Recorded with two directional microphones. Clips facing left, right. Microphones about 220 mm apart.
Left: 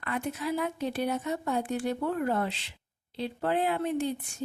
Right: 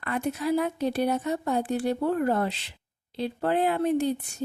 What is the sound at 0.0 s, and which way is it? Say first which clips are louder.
A woman's voice: right 4 dB; 40° right (ahead or behind).